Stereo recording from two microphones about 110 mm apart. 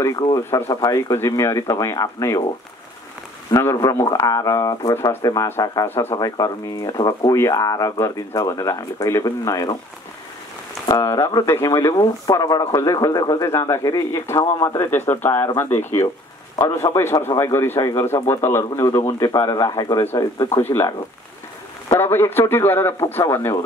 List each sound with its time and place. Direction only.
0.7 s speech: 35° left (ahead or behind)
3.5 s speech: 30° left (ahead or behind)
10.9 s speech: 35° left (ahead or behind)
14.9 s a man's voice: 20° left (ahead or behind)
21.9 s a man's voice: 20° left (ahead or behind)